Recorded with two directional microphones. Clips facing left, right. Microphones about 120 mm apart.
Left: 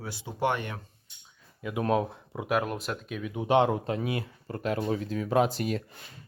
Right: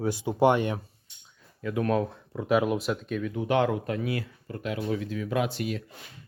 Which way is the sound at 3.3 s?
25° left (ahead or behind).